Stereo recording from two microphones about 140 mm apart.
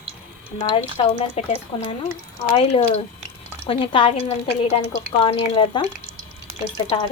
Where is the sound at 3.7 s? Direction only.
40° left (ahead or behind).